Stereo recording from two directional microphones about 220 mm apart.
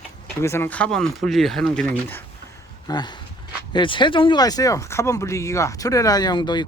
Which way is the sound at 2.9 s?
20° left (ahead or behind).